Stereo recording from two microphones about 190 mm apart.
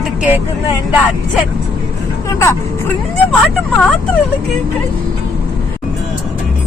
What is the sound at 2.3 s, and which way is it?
Speech, 15° left (ahead or behind).